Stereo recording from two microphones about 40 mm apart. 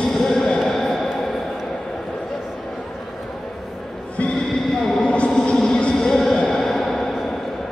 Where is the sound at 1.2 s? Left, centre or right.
Centre.